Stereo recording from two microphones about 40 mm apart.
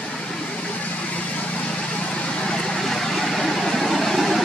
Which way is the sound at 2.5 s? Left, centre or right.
Centre.